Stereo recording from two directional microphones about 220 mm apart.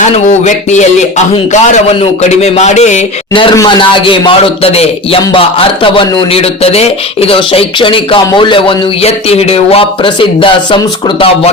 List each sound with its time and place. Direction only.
0.0 s a man's voice: 30° left (ahead or behind)